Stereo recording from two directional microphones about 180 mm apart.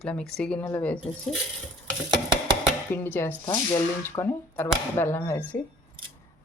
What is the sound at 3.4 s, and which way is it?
Speech, 25° left (ahead or behind).